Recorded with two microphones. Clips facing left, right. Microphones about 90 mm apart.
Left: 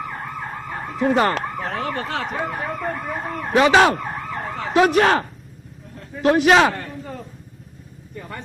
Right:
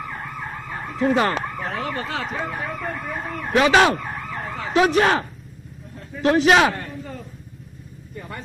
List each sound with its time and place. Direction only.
0.1 s ambulance: 40° left (ahead or behind)
1.4 s speech: 40° left (ahead or behind)
3.5 s police car: 25° left (ahead or behind)
3.9 s emergency vehicle: 40° left (ahead or behind)
5.9 s a sound: 40° left (ahead or behind)